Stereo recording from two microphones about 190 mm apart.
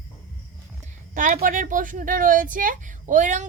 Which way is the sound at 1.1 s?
45° right (ahead or behind).